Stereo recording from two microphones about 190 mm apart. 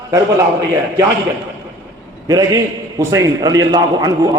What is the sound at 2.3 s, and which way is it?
A man's voice, 20° right (ahead or behind).